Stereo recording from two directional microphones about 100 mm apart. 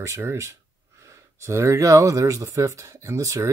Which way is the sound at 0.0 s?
30° right (ahead or behind).